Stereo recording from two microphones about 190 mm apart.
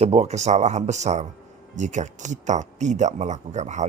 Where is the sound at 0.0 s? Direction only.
35° right (ahead or behind).